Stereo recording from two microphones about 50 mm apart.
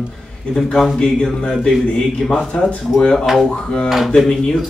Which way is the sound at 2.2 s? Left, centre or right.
Centre.